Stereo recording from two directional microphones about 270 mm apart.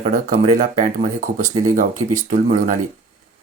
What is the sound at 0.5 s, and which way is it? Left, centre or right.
Speech, right.